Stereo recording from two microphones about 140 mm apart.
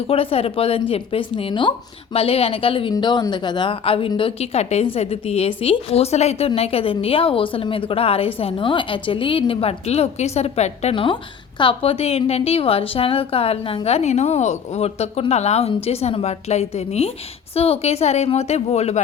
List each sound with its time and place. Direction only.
0.1 s a woman's voice: 45° left (ahead or behind)